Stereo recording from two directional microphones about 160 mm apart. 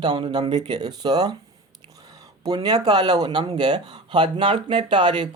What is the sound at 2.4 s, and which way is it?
Speech, 25° right (ahead or behind).